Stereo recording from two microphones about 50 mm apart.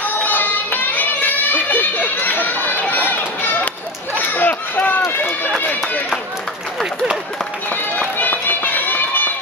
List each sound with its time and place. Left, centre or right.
0.0 s music: left
2.9 s run: left
4.3 s a sound: left
5.6 s run: left
7.7 s run: left